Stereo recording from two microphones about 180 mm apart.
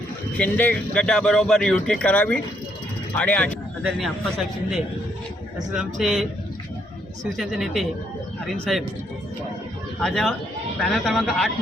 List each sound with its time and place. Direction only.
0.3 s speech: 10° left (ahead or behind)
5.7 s speech: 5° right (ahead or behind)
7.3 s speech: centre (ahead or behind)
10.0 s speech: centre (ahead or behind)